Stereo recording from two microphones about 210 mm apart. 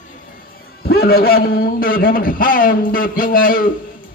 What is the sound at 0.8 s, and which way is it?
A man's voice, 45° left (ahead or behind).